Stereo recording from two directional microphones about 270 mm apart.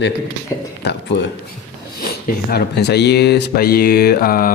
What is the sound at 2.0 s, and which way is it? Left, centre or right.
Speech, left.